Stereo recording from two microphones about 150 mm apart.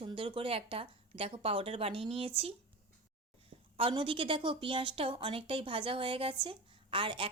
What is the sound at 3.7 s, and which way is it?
A woman's voice, 35° right (ahead or behind).